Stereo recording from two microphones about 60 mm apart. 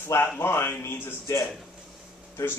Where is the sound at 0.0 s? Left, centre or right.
Left.